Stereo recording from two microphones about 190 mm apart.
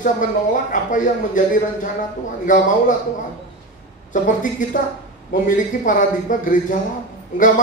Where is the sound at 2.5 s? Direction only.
45° left (ahead or behind).